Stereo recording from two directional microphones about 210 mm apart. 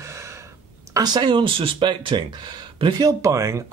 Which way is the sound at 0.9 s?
20° right (ahead or behind).